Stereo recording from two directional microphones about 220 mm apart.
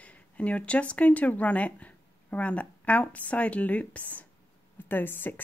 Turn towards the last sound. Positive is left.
turn(degrees=10)  # may be behind; listen again after turning